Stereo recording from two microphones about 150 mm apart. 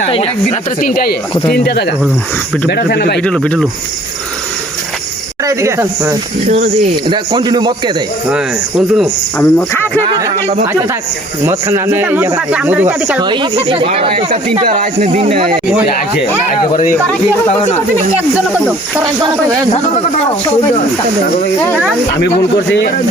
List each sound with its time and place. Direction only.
0.8 s speech: 75° left (ahead or behind)
1.5 s speech: 90° left
3.2 s speech: 5° left (ahead or behind)
5.5 s speech: 20° right (ahead or behind)
7.1 s speech: 30° right (ahead or behind)
9.4 s speech: 15° left (ahead or behind)
10.1 s speech: 25° right (ahead or behind)
11.4 s speech: 15° right (ahead or behind)
13.1 s speech: 30° right (ahead or behind)
14.7 s speech: 55° right (ahead or behind)
16.7 s speech: 60° left (ahead or behind)
18.2 s speech: 10° right (ahead or behind)